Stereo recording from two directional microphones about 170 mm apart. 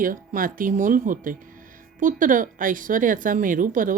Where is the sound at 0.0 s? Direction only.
55° right (ahead or behind).